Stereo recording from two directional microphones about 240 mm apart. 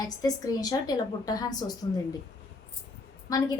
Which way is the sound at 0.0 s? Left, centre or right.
Centre.